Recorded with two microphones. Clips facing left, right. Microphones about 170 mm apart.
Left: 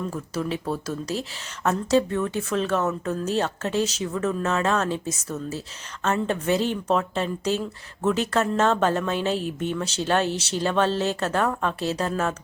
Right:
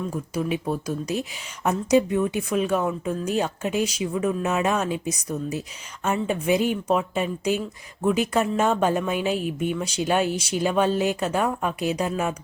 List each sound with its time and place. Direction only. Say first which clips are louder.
0.1 s speech: right 2 dB; 15° right (ahead or behind)